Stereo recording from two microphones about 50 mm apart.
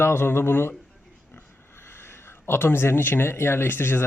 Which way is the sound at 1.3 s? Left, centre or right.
Left.